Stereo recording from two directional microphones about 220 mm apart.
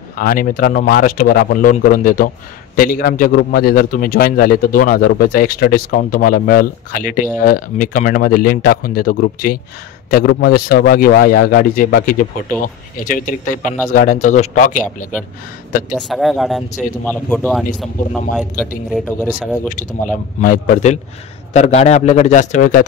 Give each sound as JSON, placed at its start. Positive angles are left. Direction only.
{"t": 0.1, "sound": "speech", "side_deg": 40}
{"t": 15.9, "sound": "speech", "side_deg": 0}
{"t": 18.9, "sound": "speech", "side_deg": 5}
{"t": 20.1, "sound": "speech", "side_deg": 35}